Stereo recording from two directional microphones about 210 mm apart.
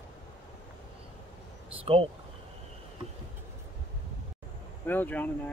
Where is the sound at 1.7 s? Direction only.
25° right (ahead or behind).